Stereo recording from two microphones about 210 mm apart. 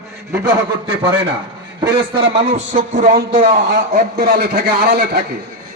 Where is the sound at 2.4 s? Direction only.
35° right (ahead or behind).